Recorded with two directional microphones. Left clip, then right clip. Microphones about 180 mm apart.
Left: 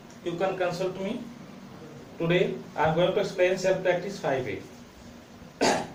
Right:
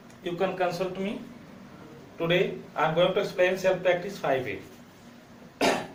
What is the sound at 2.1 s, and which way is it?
Speech, 15° right (ahead or behind).